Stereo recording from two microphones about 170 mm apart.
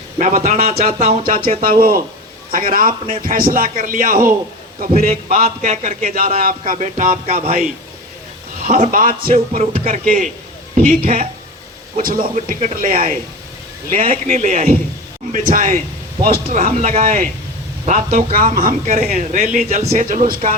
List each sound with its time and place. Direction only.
0.2 s a man's voice: 50° right (ahead or behind)
1.6 s speech: 60° right (ahead or behind)
4.9 s a man's voice: 35° right (ahead or behind)
6.4 s speech: 55° right (ahead or behind); by 7.6 s 40° right (ahead or behind)
8.6 s speech: 45° right (ahead or behind)
9.6 s speech: 40° right (ahead or behind); by 14.2 s 55° right (ahead or behind)
14.3 s a man's voice: 40° right (ahead or behind)
16.6 s a man's voice: 40° right (ahead or behind)
18.3 s speech: 55° right (ahead or behind)
19.6 s speech: 40° right (ahead or behind); by 20.6 s 55° right (ahead or behind)